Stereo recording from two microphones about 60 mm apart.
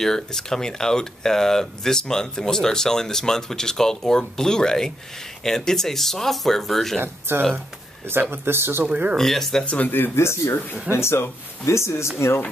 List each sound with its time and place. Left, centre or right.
0.0 s speech: centre
7.0 s speech: right
8.8 s speech: right
9.1 s speech: centre
9.7 s speech: left